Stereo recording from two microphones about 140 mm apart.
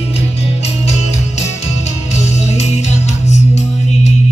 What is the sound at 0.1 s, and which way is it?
Music, 50° left (ahead or behind).